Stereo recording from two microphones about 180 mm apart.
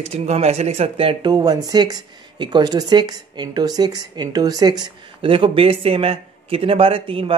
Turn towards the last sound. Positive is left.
turn(degrees=-30)  # may be behind; listen again after turning